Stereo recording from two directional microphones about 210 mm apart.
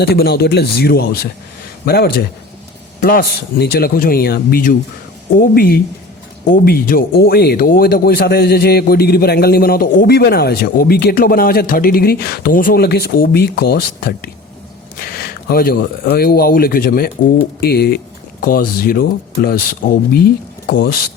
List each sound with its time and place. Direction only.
0.0 s speech: 50° left (ahead or behind)